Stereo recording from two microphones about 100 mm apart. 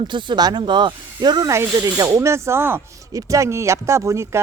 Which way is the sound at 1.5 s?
30° right (ahead or behind).